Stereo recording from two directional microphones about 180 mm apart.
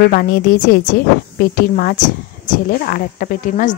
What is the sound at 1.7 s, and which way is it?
Speech, 50° left (ahead or behind).